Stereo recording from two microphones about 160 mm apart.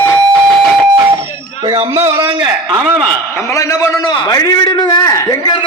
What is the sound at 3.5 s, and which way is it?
A man's voice, 20° left (ahead or behind).